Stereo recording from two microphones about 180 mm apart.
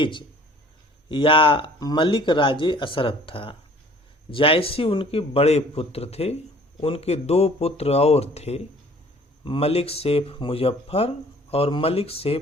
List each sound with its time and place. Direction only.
0.0 s a man's voice: 25° left (ahead or behind)